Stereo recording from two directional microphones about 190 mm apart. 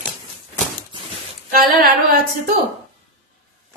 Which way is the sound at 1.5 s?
50° right (ahead or behind).